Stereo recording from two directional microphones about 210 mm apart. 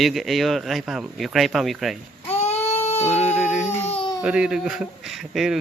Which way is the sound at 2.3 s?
30° left (ahead or behind).